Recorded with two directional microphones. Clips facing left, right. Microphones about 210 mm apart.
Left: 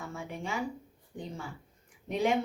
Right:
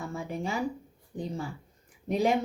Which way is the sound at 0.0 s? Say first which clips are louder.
Right 5 dB; 35° right (ahead or behind).